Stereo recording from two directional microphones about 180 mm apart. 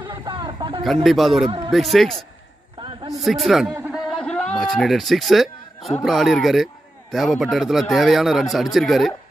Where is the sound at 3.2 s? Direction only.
Centre (ahead or behind).